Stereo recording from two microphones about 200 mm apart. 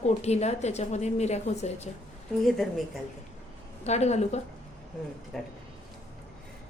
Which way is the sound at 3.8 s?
35° left (ahead or behind).